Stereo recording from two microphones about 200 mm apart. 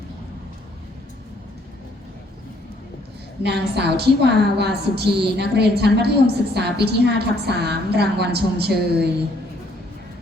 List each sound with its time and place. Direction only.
3.4 s a woman's voice: 55° right (ahead or behind)